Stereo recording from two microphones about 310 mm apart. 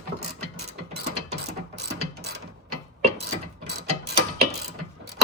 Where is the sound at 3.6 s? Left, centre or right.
Right.